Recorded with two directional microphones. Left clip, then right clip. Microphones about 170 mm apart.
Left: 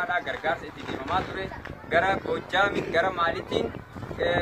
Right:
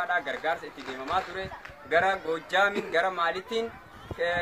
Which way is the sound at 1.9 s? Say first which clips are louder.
Left 1 dB; 30° right (ahead or behind).